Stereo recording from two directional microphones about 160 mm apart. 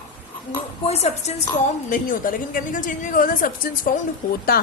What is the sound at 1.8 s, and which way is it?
A woman's voice, 55° left (ahead or behind).